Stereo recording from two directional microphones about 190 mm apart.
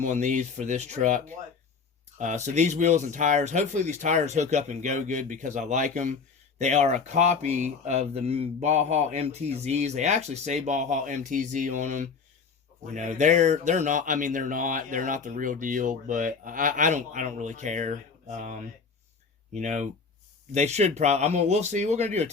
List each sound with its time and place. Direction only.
0.0 s speech: 40° right (ahead or behind)